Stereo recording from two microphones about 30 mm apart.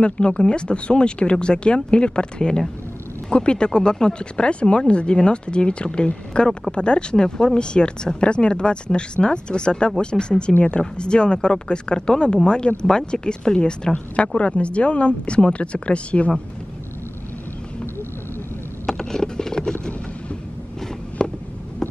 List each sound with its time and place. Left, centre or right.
0.0 s speech: left
14.1 s speech: left
18.9 s a sound: centre
21.2 s fireworks: left